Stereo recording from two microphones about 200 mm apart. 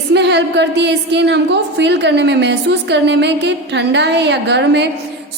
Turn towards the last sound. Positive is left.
turn(degrees=-60)  # may be behind; listen again after turning